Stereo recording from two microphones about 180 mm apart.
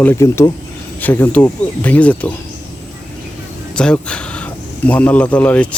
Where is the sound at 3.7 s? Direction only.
5° left (ahead or behind).